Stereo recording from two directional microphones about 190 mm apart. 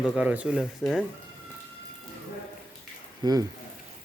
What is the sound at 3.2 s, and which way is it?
Speech, 20° right (ahead or behind).